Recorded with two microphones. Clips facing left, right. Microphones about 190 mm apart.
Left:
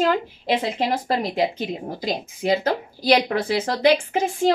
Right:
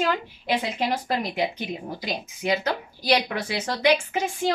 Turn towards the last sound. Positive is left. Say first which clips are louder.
# left 4 dB
turn(degrees=30)  # may be behind; listen again after turning